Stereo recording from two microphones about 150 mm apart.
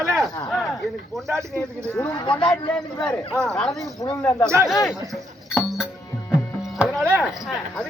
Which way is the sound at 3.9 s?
25° left (ahead or behind).